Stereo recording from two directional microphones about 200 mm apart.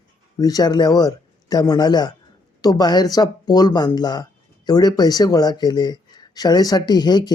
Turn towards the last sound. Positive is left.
turn(degrees=20)  # may be behind; listen again after turning